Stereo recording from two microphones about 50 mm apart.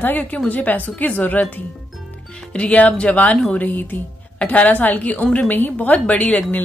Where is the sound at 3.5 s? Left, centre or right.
Left.